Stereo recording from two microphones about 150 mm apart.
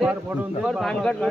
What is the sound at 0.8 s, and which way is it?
Speech, 5° left (ahead or behind).